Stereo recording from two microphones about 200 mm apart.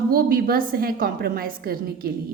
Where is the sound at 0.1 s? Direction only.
50° right (ahead or behind).